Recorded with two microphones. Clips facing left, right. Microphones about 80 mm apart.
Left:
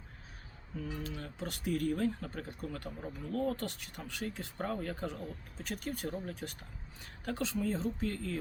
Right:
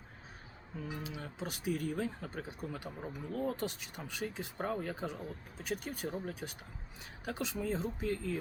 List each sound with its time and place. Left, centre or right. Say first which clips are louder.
0.8 s speech: left 2 dB; centre